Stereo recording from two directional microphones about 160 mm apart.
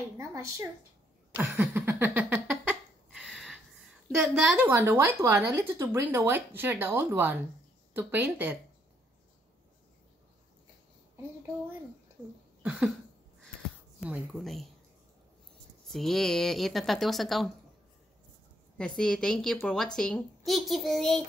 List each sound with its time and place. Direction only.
0.2 s a woman's voice: 20° right (ahead or behind)
1.5 s a sound: 15° right (ahead or behind)
3.2 s a woman's voice: centre (ahead or behind)
12.6 s a woman's voice: 5° right (ahead or behind)
14.4 s a woman's voice: centre (ahead or behind)
15.9 s a woman's voice: centre (ahead or behind)
18.8 s a woman's voice: 5° left (ahead or behind)